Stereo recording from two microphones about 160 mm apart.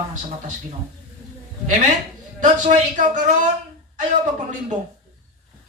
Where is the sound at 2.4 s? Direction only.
50° right (ahead or behind).